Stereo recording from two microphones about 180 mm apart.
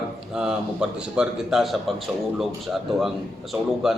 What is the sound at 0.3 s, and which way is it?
A man's voice, 5° right (ahead or behind).